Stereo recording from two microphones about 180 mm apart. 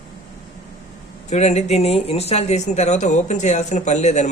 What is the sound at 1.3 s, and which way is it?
A man's voice, 40° left (ahead or behind).